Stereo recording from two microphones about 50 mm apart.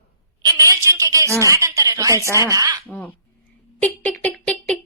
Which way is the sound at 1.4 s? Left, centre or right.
Right.